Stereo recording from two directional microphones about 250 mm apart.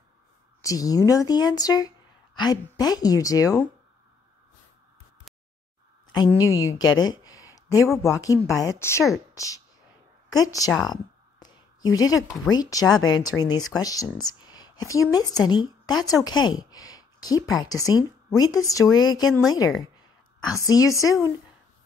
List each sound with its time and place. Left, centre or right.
0.6 s speech: centre
6.1 s speech: centre
7.0 s a sound: centre
8.0 s speech: centre
10.7 s speech: centre
11.3 s a sound: centre
12.4 s speech: centre
16.3 s a sound: centre
17.5 s speech: centre
20.5 s speech: centre